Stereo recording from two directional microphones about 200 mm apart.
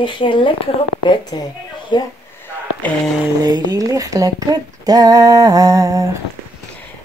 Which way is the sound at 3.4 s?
20° right (ahead or behind).